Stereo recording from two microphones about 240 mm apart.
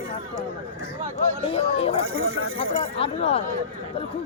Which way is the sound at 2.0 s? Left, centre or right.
Right.